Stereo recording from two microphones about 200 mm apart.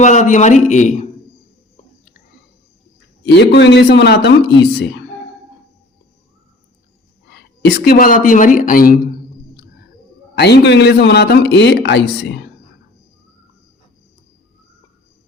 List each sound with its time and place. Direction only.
0.0 s a man's voice: 35° left (ahead or behind)
3.2 s a man's voice: 60° left (ahead or behind)
7.3 s speech: 55° left (ahead or behind)
10.3 s a man's voice: 55° left (ahead or behind)